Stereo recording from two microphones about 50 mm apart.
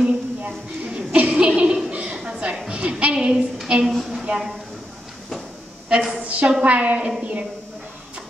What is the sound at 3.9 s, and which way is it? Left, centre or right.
Speech, centre.